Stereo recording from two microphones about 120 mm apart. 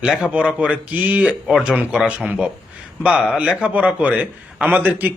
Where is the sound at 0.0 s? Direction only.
5° right (ahead or behind).